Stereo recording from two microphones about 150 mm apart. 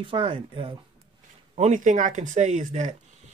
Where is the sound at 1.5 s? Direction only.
55° right (ahead or behind).